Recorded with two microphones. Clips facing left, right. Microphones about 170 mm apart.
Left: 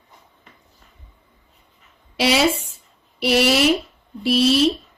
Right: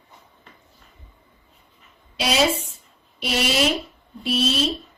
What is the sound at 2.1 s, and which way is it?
A woman's voice, 70° left (ahead or behind).